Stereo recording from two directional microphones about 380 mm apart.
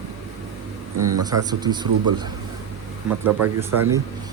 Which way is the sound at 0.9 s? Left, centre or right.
Right.